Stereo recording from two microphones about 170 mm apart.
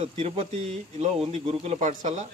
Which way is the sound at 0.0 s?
40° right (ahead or behind).